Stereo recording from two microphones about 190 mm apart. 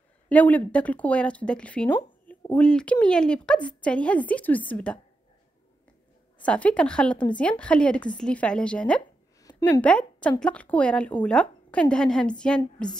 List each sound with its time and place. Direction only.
0.3 s a woman's voice: 10° left (ahead or behind)
6.4 s a woman's voice: 5° left (ahead or behind)
9.4 s a sound: 15° left (ahead or behind)
9.8 s a woman's voice: 5° left (ahead or behind)